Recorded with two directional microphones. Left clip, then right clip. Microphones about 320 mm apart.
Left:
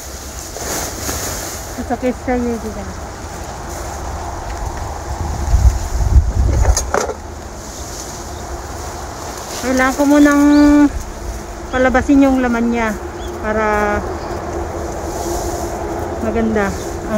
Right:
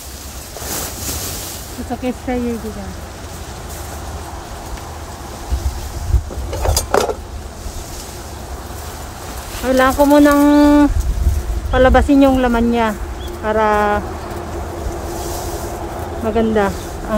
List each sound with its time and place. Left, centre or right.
2.3 s speech: centre
6.6 s vehicle: right
9.7 s speech: centre
16.3 s speech: centre